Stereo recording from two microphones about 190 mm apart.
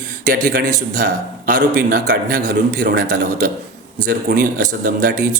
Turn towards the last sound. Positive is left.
turn(degrees=-45)  # may be behind; listen again after turning